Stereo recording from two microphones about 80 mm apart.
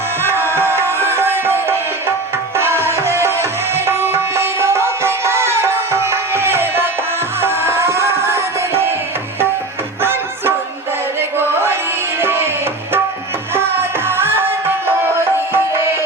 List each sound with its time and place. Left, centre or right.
0.2 s music: right
2.6 s tabla: right
7.4 s music: right
10.0 s music: right
13.5 s music: right